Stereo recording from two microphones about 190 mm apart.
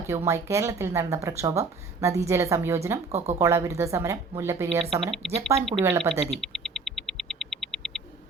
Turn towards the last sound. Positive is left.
turn(degrees=0)  # may be behind; listen again after turning